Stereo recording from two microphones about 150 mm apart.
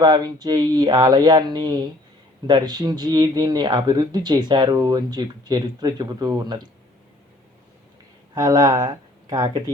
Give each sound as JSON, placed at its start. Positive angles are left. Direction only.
{"t": 0.0, "sound": "speech", "side_deg": -25}
{"t": 8.4, "sound": "speech", "side_deg": -25}